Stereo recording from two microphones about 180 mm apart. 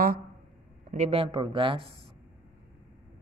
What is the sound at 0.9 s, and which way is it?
Speech, 35° right (ahead or behind).